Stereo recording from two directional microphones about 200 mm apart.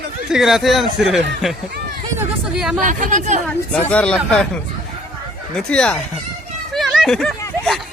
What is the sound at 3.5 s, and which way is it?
Speech, 5° left (ahead or behind).